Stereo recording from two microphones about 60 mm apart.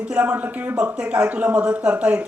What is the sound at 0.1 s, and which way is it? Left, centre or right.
A woman's voice, right.